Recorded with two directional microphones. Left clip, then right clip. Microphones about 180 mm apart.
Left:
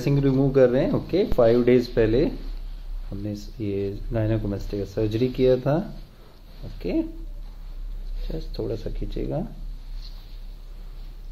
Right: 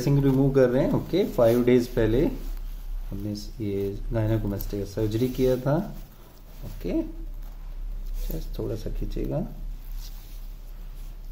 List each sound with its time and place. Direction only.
0.0 s speech: 20° left (ahead or behind)
6.8 s speech: 15° left (ahead or behind)
8.3 s speech: 15° left (ahead or behind)